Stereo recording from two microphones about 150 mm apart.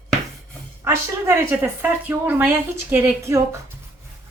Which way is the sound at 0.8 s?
15° right (ahead or behind).